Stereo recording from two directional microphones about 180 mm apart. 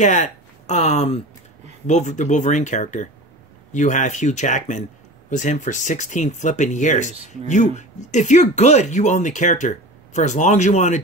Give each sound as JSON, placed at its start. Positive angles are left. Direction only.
{"t": 0.0, "sound": "speech", "side_deg": 40}